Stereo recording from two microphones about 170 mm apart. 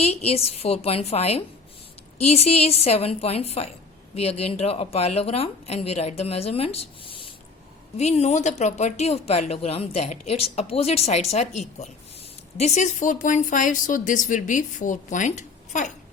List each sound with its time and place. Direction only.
0.0 s a woman's voice: 40° left (ahead or behind)